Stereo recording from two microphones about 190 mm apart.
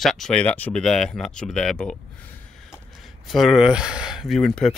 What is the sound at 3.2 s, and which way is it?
Speech, centre (ahead or behind).